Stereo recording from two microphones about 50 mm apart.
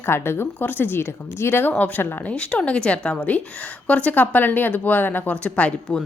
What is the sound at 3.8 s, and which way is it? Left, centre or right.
A woman's voice, left.